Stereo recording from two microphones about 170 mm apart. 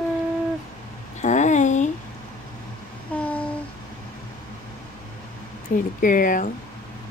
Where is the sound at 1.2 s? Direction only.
45° left (ahead or behind).